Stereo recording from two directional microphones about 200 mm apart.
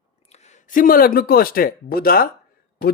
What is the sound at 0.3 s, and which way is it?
Speech, 35° left (ahead or behind).